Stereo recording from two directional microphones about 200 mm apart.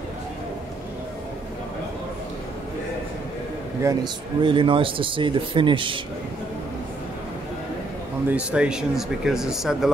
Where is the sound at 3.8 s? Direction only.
20° right (ahead or behind).